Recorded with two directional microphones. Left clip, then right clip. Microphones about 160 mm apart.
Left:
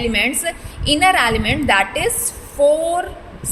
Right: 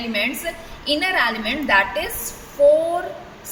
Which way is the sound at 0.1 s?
85° left.